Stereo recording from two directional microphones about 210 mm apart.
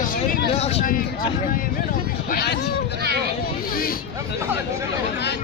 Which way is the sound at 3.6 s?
45° left (ahead or behind).